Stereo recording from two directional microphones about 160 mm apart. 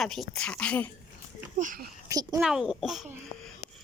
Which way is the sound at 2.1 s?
20° right (ahead or behind).